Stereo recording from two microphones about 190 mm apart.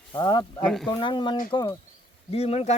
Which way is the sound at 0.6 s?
Centre (ahead or behind).